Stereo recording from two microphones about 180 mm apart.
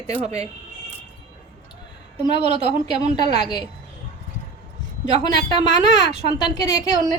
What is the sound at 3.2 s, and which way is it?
Speech, 35° right (ahead or behind).